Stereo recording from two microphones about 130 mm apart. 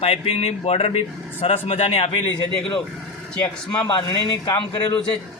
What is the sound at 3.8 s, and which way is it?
A man's voice, 30° left (ahead or behind).